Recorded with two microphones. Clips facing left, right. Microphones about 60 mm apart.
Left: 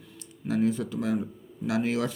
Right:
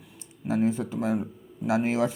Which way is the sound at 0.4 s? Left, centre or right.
Right.